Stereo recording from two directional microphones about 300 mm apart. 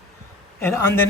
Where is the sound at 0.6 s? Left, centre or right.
Centre.